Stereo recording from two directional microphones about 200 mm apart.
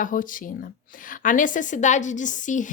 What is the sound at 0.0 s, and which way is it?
A woman's voice, 40° left (ahead or behind).